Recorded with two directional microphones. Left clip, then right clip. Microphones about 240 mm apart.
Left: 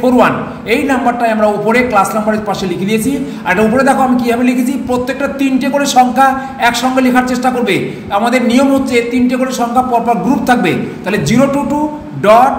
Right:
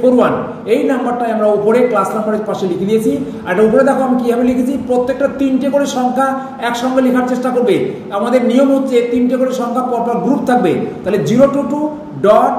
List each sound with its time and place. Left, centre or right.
0.0 s a man's voice: left
3.4 s a man's voice: left